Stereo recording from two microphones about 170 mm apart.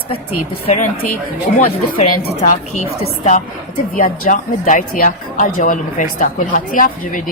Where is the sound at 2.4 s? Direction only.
45° left (ahead or behind).